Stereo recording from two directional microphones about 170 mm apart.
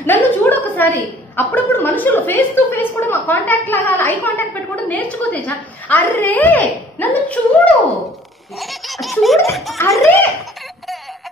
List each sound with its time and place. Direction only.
0.0 s a woman's voice: 10° left (ahead or behind)
8.5 s laughter: centre (ahead or behind)